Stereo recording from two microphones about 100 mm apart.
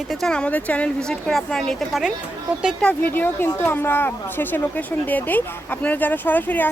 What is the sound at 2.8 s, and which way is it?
Speech, 15° left (ahead or behind).